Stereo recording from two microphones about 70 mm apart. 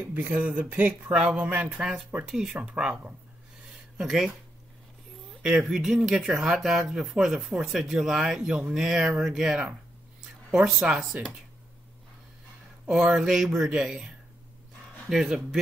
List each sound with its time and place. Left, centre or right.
0.1 s speech: right
1.8 s speech: centre
3.6 s a sound: centre
5.4 s speech: centre
12.8 s speech: centre